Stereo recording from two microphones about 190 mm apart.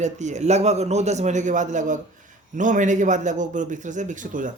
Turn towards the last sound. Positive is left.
turn(degrees=-45)  # may be behind; listen again after turning